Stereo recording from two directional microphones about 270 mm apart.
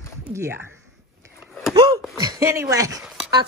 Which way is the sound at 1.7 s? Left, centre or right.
Centre.